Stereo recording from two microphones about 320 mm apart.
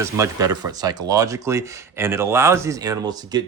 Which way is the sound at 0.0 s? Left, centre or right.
Centre.